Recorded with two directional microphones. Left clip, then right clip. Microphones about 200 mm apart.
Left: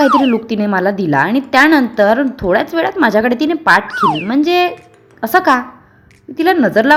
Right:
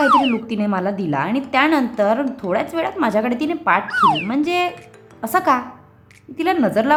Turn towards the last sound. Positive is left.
turn(degrees=20)  # may be behind; listen again after turning